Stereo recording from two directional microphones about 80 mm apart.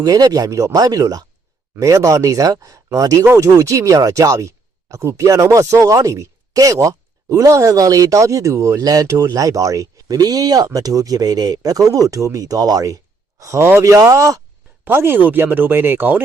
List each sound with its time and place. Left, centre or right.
0.0 s speech: right
1.8 s speech: right
14.8 s speech: right